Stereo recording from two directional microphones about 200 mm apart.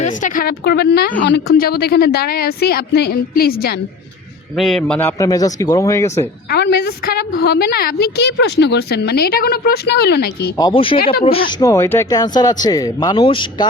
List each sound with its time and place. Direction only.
0.0 s a woman's voice: 40° left (ahead or behind)
1.2 s a woman's voice: 60° left (ahead or behind)
4.5 s speech: centre (ahead or behind)
6.5 s a woman's voice: 55° left (ahead or behind)
10.6 s speech: 25° left (ahead or behind)
10.9 s a woman's voice: 45° left (ahead or behind)
11.3 s speech: 30° left (ahead or behind)
11.6 s speech: 15° left (ahead or behind)